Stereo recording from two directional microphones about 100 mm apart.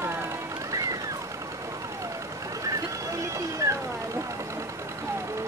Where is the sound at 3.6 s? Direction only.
30° right (ahead or behind).